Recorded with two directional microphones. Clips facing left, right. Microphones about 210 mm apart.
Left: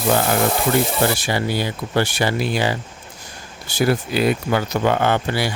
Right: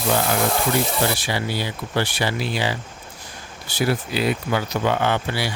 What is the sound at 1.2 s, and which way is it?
Speech, 50° left (ahead or behind).